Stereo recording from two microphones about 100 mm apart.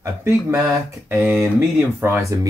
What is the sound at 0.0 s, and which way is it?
Speech, 25° right (ahead or behind).